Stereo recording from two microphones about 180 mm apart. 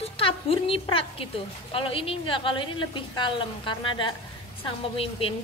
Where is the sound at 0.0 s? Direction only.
30° left (ahead or behind).